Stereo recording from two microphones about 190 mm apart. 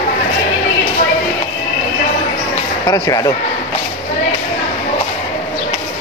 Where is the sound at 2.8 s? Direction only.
20° left (ahead or behind).